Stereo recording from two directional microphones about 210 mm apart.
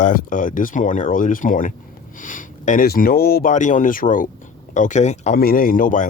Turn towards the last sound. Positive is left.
turn(degrees=40)  # may be behind; listen again after turning